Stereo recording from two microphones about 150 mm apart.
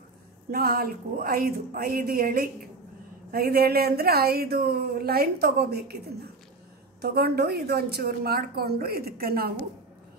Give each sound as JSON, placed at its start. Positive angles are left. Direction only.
{"t": 0.5, "sound": "speech", "side_deg": -90}
{"t": 7.0, "sound": "speech", "side_deg": -90}